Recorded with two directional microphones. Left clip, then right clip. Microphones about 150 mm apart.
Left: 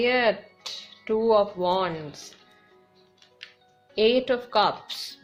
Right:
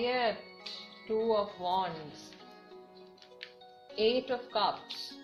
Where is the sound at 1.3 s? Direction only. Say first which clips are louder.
Left 11 dB; 90° left.